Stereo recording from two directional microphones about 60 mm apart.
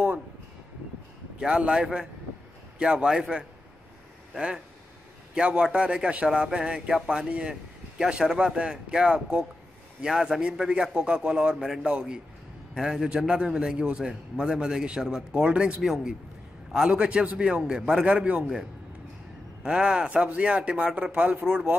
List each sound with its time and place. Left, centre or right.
1.4 s a man's voice: centre
15.8 s a man's voice: centre
19.6 s a man's voice: centre